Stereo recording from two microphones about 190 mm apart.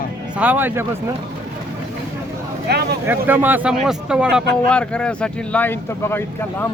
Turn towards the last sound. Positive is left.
turn(degrees=10)  # may be behind; listen again after turning